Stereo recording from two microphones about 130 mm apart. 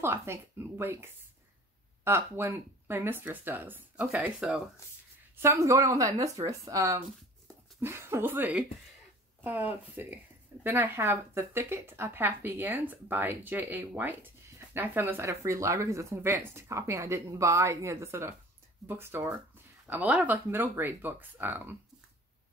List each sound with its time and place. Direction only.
0.0 s a woman's voice: 20° right (ahead or behind)
5.3 s a woman's voice: 20° right (ahead or behind)